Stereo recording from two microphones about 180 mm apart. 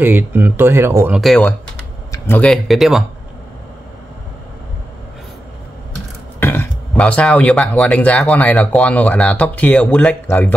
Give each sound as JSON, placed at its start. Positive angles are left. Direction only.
{"t": 0.0, "sound": "speech", "side_deg": -10}
{"t": 1.2, "sound": "speech", "side_deg": 0}
{"t": 2.1, "sound": "speech", "side_deg": 10}
{"t": 6.4, "sound": "speech", "side_deg": 10}